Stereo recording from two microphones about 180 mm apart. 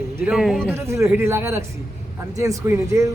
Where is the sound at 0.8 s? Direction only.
15° right (ahead or behind).